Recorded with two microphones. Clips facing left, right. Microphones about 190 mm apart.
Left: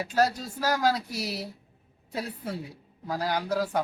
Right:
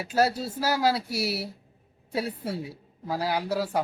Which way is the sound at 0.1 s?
10° right (ahead or behind).